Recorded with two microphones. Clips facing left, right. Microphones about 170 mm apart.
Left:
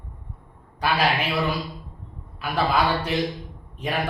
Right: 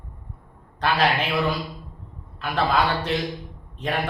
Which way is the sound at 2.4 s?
10° left (ahead or behind).